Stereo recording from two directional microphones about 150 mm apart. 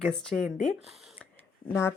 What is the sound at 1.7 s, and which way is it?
Speech, 15° left (ahead or behind).